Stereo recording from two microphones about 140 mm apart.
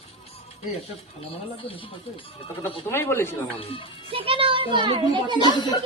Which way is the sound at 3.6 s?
45° left (ahead or behind).